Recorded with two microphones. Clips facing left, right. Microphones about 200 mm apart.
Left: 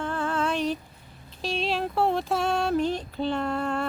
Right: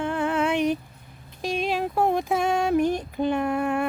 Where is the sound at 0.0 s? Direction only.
15° right (ahead or behind).